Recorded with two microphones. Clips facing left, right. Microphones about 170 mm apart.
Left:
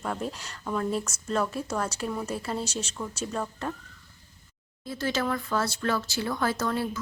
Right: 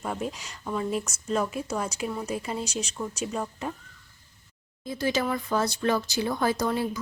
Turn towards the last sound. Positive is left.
turn(degrees=-15)  # may be behind; listen again after turning